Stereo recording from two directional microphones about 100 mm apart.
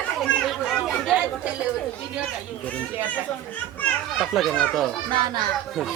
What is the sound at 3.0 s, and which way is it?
Speech, 15° left (ahead or behind).